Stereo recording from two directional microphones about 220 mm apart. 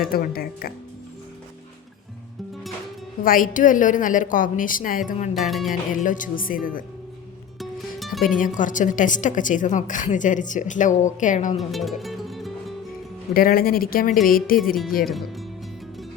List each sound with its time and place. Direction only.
0.0 s speech: 40° left (ahead or behind)
3.2 s a woman's voice: 40° left (ahead or behind)
5.3 s speech: centre (ahead or behind)
5.9 s a woman's voice: 35° left (ahead or behind)
7.6 s music: centre (ahead or behind)
8.5 s a woman's voice: 35° left (ahead or behind)
11.5 s music: centre (ahead or behind)
13.3 s a woman's voice: 40° left (ahead or behind)
15.0 s speech: centre (ahead or behind)